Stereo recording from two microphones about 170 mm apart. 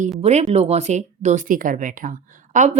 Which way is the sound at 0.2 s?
40° right (ahead or behind).